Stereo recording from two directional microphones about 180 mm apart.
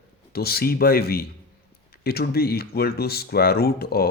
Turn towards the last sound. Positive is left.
turn(degrees=60)  # may be behind; listen again after turning